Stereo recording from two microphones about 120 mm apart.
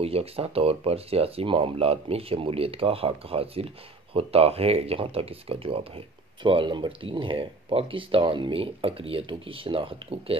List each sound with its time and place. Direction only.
0.0 s speech: 55° right (ahead or behind)